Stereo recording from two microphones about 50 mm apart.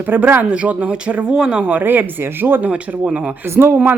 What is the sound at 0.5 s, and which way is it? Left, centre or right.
Speech, right.